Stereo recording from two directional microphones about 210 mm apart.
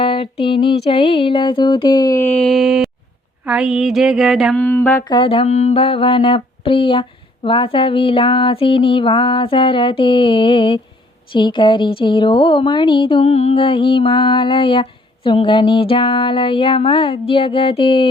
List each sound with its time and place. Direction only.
0.0 s music: 25° left (ahead or behind)
0.9 s speech: 30° left (ahead or behind); by 2.9 s centre (ahead or behind)
3.4 s a sound: 5° right (ahead or behind)
4.6 s speech: 10° left (ahead or behind)
5.0 s speech: 25° left (ahead or behind)